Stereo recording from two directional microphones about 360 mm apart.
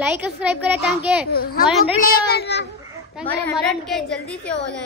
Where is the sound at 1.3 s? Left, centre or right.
Left.